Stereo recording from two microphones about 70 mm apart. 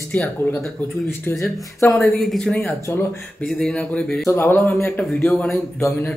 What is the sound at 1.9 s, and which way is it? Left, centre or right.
Speech, centre.